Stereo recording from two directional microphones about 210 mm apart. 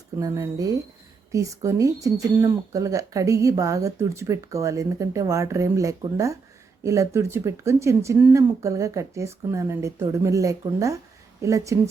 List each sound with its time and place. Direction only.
0.2 s speech: 15° right (ahead or behind)